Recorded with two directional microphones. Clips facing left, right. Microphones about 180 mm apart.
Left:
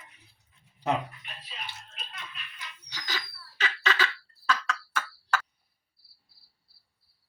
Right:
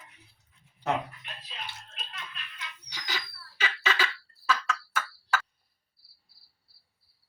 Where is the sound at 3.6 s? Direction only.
10° right (ahead or behind).